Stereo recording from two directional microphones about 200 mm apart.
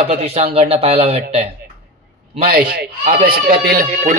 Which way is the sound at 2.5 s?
50° right (ahead or behind).